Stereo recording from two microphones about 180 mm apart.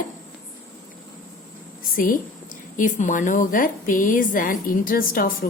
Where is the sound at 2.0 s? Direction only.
50° left (ahead or behind).